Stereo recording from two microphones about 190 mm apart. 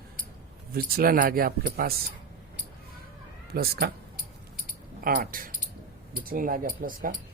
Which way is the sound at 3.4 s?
55° right (ahead or behind).